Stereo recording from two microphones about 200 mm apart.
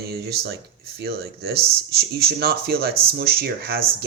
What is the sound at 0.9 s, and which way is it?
Speech, 50° right (ahead or behind).